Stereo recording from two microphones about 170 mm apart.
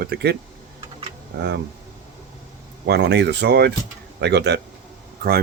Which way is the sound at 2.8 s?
80° right.